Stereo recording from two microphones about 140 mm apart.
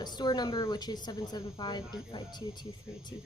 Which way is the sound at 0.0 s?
30° left (ahead or behind).